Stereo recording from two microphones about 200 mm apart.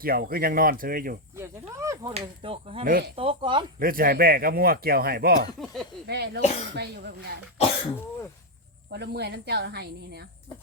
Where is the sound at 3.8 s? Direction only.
45° right (ahead or behind).